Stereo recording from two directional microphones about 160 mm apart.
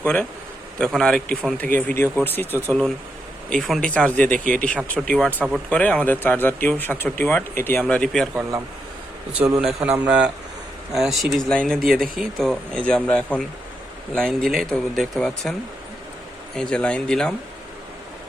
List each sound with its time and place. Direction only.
0.0 s speech: 5° left (ahead or behind)
8.4 s a man's voice: 15° right (ahead or behind)
9.4 s a man's voice: 5° right (ahead or behind)
11.9 s speech: 65° right (ahead or behind)
12.2 s speech: 5° left (ahead or behind)
16.6 s speech: 5° left (ahead or behind)